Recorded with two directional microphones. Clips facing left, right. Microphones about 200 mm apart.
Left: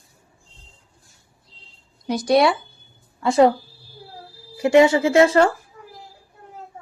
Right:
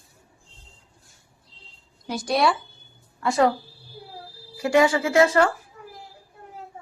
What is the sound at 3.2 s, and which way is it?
Speech, 25° left (ahead or behind).